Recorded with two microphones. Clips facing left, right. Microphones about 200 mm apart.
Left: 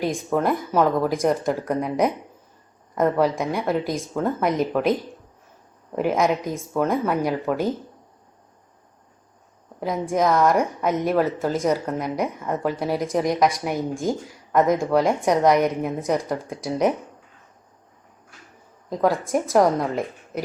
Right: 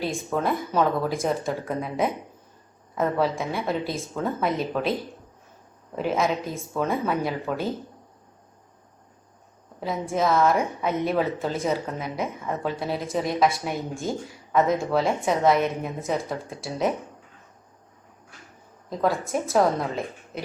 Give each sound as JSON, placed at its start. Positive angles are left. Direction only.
{"t": 0.0, "sound": "a woman's voice", "side_deg": 15}
{"t": 6.0, "sound": "a woman's voice", "side_deg": 15}
{"t": 9.8, "sound": "a woman's voice", "side_deg": 15}
{"t": 18.9, "sound": "a woman's voice", "side_deg": 15}